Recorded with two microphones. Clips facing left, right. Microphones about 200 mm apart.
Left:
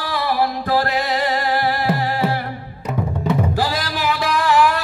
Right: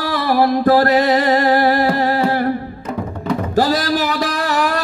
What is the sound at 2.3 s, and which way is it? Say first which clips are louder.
Music: right 7 dB; 45° right (ahead or behind).